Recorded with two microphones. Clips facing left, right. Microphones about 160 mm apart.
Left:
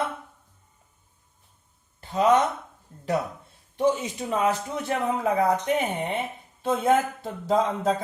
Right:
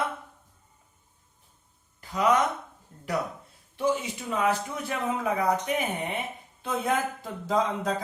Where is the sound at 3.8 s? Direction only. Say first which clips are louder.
Left 4 dB; 30° left (ahead or behind).